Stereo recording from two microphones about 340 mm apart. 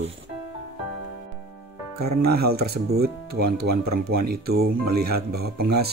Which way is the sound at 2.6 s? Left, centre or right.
Right.